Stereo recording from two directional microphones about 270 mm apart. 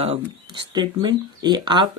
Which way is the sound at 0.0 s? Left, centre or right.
Centre.